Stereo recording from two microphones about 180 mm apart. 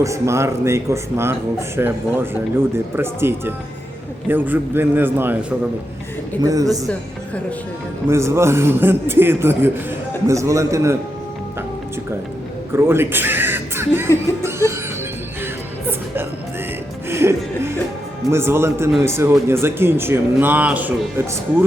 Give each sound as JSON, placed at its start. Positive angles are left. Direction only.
{"t": 0.0, "sound": "speech", "side_deg": -15}
{"t": 6.4, "sound": "a man's voice", "side_deg": -20}
{"t": 8.0, "sound": "speech", "side_deg": -15}
{"t": 12.7, "sound": "speech", "side_deg": -15}
{"t": 14.4, "sound": "music", "side_deg": -15}
{"t": 17.1, "sound": "music", "side_deg": -15}
{"t": 18.3, "sound": "speech", "side_deg": -15}